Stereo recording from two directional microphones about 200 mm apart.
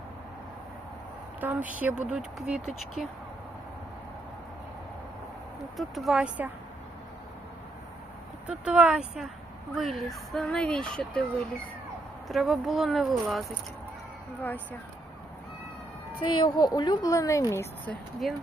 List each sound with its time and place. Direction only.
1.4 s a woman's voice: 10° right (ahead or behind)
5.7 s speech: centre (ahead or behind)
8.4 s a woman's voice: 5° right (ahead or behind)
16.2 s a woman's voice: 25° left (ahead or behind)